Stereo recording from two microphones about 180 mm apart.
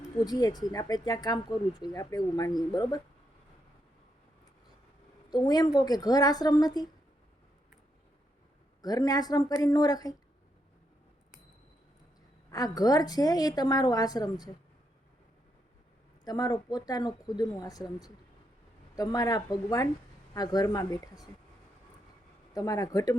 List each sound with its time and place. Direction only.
0.3 s speech: 20° left (ahead or behind)
5.3 s speech: 20° left (ahead or behind)
8.8 s speech: 20° left (ahead or behind)
12.5 s speech: 20° left (ahead or behind)
16.2 s speech: 20° left (ahead or behind)
22.5 s speech: 20° left (ahead or behind)